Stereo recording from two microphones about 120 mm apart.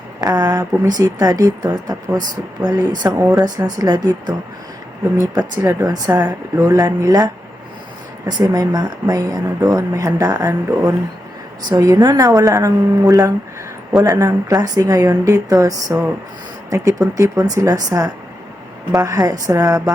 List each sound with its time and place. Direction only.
0.2 s speech: 30° right (ahead or behind)
8.3 s speech: 35° right (ahead or behind)